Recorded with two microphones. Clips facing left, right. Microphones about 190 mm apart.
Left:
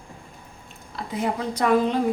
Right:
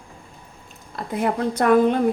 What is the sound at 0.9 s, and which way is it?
A woman's voice, 55° right (ahead or behind).